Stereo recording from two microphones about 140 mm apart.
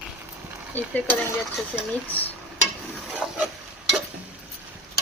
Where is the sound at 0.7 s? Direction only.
10° left (ahead or behind).